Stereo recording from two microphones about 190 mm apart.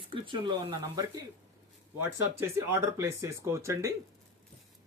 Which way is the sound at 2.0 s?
15° right (ahead or behind).